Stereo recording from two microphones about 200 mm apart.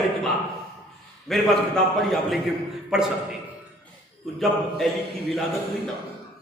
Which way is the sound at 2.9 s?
5° right (ahead or behind).